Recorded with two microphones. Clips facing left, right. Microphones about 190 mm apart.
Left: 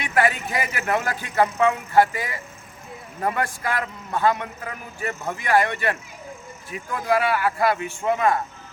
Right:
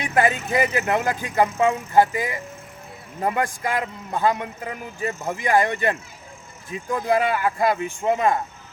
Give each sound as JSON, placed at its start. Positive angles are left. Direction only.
{"t": 0.1, "sound": "a man's voice", "side_deg": -20}